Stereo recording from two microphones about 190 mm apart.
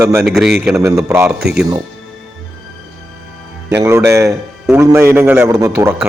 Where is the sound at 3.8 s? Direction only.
15° right (ahead or behind).